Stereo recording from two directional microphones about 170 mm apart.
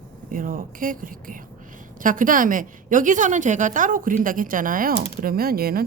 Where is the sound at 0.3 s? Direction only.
55° right (ahead or behind).